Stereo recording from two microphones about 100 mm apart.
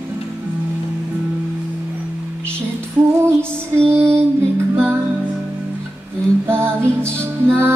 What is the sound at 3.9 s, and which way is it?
Female singing, 25° right (ahead or behind).